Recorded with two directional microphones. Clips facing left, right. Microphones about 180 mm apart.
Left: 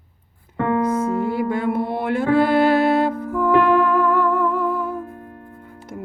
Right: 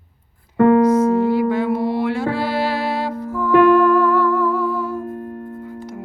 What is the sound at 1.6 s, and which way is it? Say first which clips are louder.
Music: right 3 dB; 55° left (ahead or behind).